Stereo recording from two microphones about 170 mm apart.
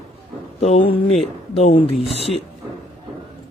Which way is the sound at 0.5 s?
45° left (ahead or behind).